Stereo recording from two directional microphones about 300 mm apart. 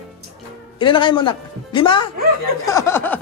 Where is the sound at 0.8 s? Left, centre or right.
Centre.